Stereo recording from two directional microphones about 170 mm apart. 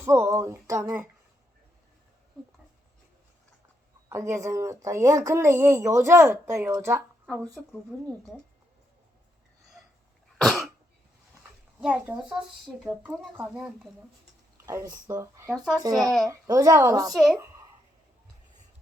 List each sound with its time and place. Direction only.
0.0 s a woman's voice: 15° right (ahead or behind)
4.1 s a woman's voice: 15° right (ahead or behind)
7.5 s speech: centre (ahead or behind)
10.3 s cough: centre (ahead or behind)
11.8 s a woman's voice: 5° right (ahead or behind)
14.7 s a woman's voice: 20° right (ahead or behind)
15.5 s speech: centre (ahead or behind)
16.2 s a woman's voice: 20° right (ahead or behind)
17.2 s speech: centre (ahead or behind)